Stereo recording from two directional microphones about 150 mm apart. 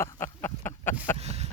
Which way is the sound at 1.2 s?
45° right (ahead or behind).